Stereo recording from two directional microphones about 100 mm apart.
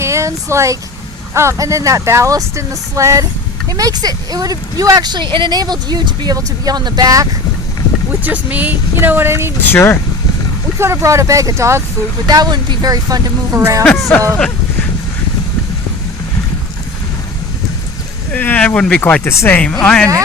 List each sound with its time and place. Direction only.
0.0 s speech: 30° right (ahead or behind)
8.2 s speech: 15° right (ahead or behind)
9.6 s speech: 20° left (ahead or behind)
10.8 s speech: 25° right (ahead or behind)
12.3 s speech: 40° right (ahead or behind)
13.9 s speech: 20° left (ahead or behind)
18.3 s speech: 15° left (ahead or behind)
19.5 s speech: 15° left (ahead or behind)